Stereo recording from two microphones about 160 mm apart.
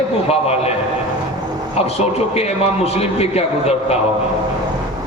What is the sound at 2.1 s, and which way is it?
A man's voice, 40° left (ahead or behind).